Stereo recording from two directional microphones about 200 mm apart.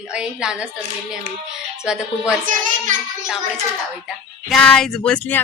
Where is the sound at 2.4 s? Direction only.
40° right (ahead or behind).